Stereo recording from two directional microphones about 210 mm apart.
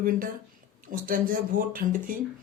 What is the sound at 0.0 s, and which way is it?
Speech, 40° right (ahead or behind).